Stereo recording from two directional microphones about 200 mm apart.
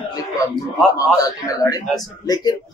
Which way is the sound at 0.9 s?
20° left (ahead or behind).